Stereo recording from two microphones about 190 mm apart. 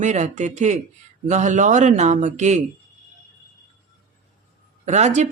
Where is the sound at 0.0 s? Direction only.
40° right (ahead or behind).